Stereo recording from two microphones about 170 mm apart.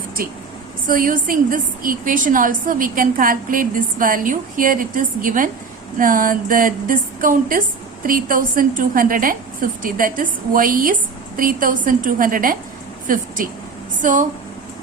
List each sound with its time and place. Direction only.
0.9 s a woman's voice: 55° right (ahead or behind)